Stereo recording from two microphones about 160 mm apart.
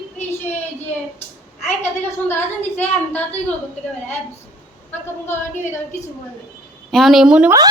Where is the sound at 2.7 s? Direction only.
10° left (ahead or behind).